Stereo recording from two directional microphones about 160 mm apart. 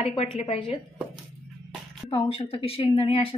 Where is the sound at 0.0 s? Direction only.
40° left (ahead or behind).